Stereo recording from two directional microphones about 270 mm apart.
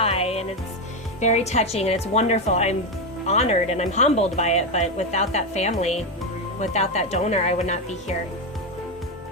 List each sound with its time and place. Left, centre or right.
0.0 s music: left
1.2 s speech: left